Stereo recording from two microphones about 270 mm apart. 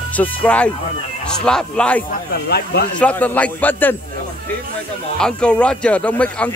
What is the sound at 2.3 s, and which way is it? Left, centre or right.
Speech, left.